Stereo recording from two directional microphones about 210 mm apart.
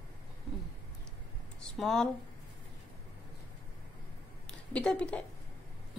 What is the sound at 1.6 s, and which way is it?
Speech, centre (ahead or behind).